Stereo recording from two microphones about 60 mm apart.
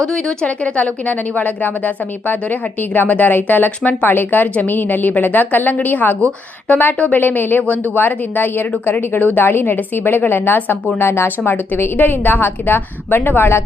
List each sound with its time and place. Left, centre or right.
0.0 s a woman's voice: centre
0.6 s speech: left